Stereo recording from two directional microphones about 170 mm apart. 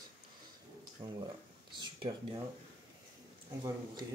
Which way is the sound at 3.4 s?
20° right (ahead or behind).